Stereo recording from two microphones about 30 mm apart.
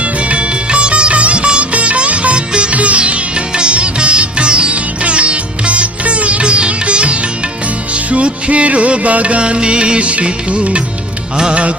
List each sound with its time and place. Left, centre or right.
0.0 s music: right
2.5 s music: right
2.7 s music: right
9.4 s music: right